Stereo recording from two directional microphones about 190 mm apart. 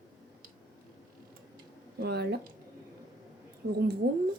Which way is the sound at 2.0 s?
60° right (ahead or behind).